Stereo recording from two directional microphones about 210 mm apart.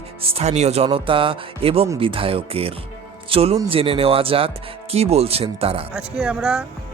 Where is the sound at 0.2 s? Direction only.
30° right (ahead or behind).